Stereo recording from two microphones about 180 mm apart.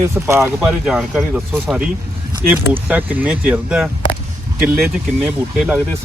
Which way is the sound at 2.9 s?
10° right (ahead or behind).